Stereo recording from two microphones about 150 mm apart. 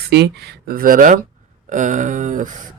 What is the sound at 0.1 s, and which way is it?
Speech, 90° right.